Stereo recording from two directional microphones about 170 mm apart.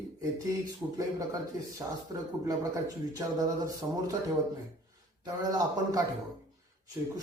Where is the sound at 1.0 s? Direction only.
20° right (ahead or behind).